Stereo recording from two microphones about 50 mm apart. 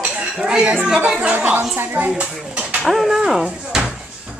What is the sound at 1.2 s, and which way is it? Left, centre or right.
Speech, right.